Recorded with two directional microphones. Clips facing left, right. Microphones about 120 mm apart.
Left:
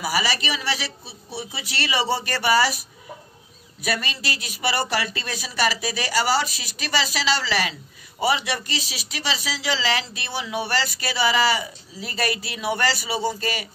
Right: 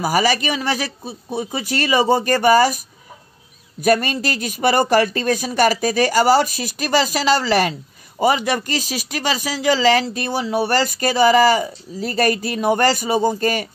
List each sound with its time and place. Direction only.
0.0 s speech: 45° right (ahead or behind)
3.8 s speech: 45° right (ahead or behind)